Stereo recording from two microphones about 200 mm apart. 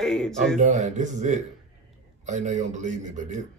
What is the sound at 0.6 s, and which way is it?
Speech, 35° right (ahead or behind).